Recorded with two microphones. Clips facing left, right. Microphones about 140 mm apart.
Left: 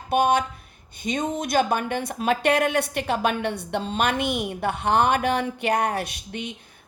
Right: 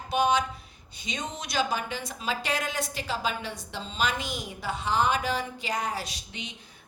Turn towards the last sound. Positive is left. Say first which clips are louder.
# left 8 dB
turn(degrees=55)  # may be behind; listen again after turning